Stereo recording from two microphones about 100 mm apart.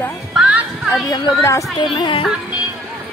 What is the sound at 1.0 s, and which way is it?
Speech, 40° left (ahead or behind).